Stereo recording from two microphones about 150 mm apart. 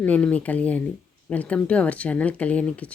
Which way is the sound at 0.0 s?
10° left (ahead or behind).